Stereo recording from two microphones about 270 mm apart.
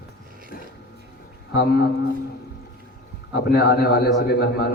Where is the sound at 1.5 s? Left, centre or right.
Left.